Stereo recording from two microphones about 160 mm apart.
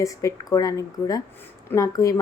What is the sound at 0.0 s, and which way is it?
Speech, 20° left (ahead or behind).